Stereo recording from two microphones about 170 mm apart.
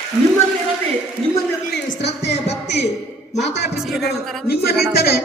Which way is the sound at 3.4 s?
90° left.